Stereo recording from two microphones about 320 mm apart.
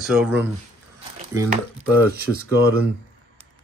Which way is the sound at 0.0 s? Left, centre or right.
Centre.